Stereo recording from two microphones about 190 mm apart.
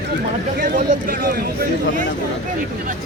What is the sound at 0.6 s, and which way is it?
Speech, 45° right (ahead or behind).